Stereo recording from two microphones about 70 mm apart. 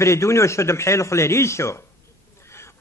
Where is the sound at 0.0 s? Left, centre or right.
Left.